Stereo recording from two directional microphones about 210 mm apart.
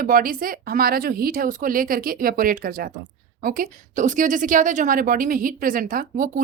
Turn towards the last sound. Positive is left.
turn(degrees=-40)  # may be behind; listen again after turning